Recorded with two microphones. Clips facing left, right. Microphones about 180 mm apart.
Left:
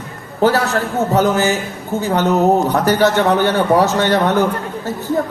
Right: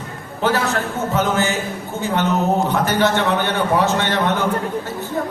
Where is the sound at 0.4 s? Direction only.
40° left (ahead or behind).